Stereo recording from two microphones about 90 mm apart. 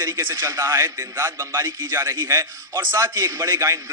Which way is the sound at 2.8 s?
25° right (ahead or behind).